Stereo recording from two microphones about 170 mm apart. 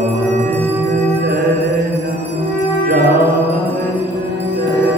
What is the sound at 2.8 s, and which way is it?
Mantra, 60° right (ahead or behind).